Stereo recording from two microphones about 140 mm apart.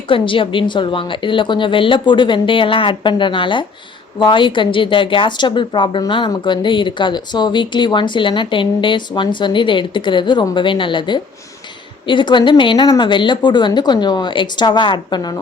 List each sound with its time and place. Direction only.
0.1 s speech: 40° left (ahead or behind)